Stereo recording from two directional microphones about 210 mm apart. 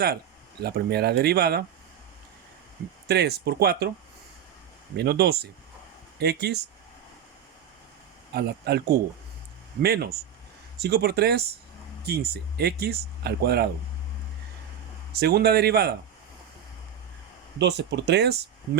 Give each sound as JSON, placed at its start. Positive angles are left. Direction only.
{"t": 0.6, "sound": "speech", "side_deg": -50}
{"t": 3.1, "sound": "speech", "side_deg": -50}
{"t": 4.9, "sound": "speech", "side_deg": -50}
{"t": 8.3, "sound": "speech", "side_deg": -50}
{"t": 15.1, "sound": "speech", "side_deg": -50}
{"t": 17.6, "sound": "speech", "side_deg": -55}